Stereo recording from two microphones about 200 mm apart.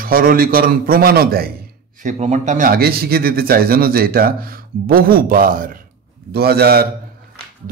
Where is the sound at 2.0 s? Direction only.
35° right (ahead or behind).